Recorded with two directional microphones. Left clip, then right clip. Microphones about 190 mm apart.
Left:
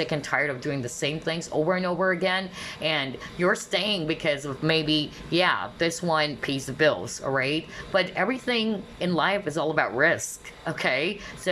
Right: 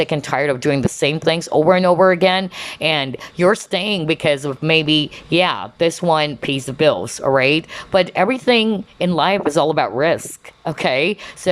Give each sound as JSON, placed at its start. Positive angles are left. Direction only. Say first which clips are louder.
{"t": 0.0, "sound": "speech", "louder": "right 7 dB", "side_deg": -20}